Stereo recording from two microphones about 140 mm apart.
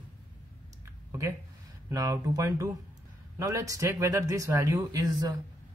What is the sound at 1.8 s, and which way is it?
Speech, 25° right (ahead or behind).